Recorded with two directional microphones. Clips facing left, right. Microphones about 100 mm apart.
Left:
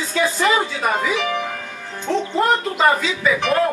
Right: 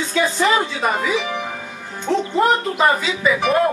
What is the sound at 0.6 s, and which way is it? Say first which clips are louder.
Speech: even; centre (ahead or behind).